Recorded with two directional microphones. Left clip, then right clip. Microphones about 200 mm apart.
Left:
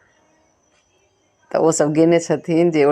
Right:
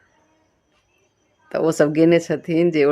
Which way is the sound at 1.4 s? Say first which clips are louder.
Left 2 dB; centre (ahead or behind).